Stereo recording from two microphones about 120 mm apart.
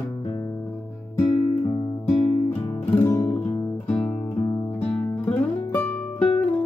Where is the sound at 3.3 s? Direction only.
20° left (ahead or behind).